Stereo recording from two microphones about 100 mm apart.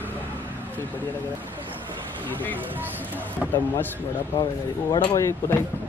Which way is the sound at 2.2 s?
15° left (ahead or behind).